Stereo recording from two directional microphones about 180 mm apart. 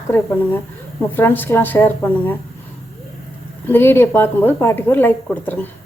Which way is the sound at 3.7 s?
10° left (ahead or behind).